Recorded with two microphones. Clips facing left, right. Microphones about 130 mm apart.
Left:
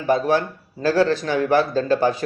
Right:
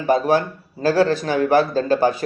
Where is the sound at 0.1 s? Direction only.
40° right (ahead or behind).